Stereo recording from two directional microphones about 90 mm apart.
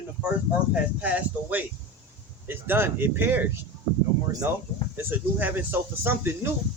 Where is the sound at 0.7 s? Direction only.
15° right (ahead or behind).